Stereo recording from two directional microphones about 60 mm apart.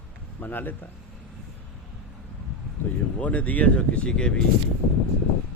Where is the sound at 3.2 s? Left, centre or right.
Left.